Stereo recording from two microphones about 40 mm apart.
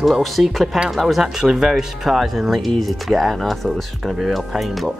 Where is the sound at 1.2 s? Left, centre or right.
Centre.